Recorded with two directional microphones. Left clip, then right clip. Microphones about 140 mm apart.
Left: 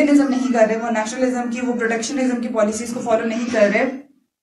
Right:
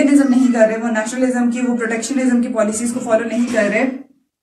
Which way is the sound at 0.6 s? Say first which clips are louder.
Left 2 dB; 30° left (ahead or behind).